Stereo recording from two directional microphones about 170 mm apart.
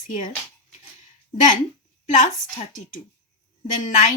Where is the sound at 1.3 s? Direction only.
50° left (ahead or behind).